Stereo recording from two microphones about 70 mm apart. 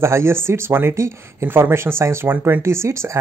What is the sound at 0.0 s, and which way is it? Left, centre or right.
Speech, right.